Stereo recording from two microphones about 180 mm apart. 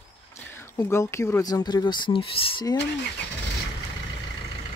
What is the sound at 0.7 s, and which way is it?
Speech, 15° left (ahead or behind).